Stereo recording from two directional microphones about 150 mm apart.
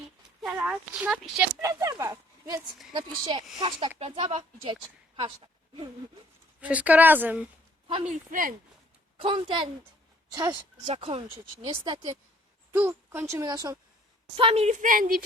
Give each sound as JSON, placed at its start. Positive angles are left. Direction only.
{"t": 0.4, "sound": "speech", "side_deg": -10}
{"t": 1.6, "sound": "speech", "side_deg": -20}
{"t": 2.9, "sound": "speech", "side_deg": -30}
{"t": 6.6, "sound": "speech", "side_deg": -10}
{"t": 8.0, "sound": "speech", "side_deg": -65}
{"t": 9.2, "sound": "speech", "side_deg": -35}
{"t": 10.9, "sound": "speech", "side_deg": -40}
{"t": 12.7, "sound": "speech", "side_deg": -15}
{"t": 14.3, "sound": "a woman's voice", "side_deg": -40}